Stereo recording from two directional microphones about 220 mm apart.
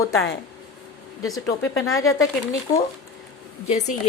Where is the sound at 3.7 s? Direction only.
30° left (ahead or behind).